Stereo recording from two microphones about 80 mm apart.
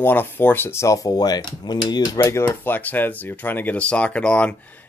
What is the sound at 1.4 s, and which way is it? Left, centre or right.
Speech, left.